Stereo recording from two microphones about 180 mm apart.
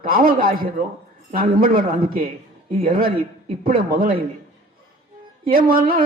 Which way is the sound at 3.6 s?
50° right (ahead or behind).